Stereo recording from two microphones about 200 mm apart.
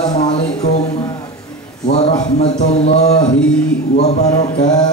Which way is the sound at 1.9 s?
35° left (ahead or behind).